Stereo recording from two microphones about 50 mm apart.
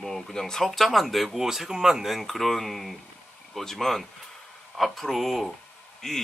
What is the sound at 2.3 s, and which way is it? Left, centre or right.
Speech, centre.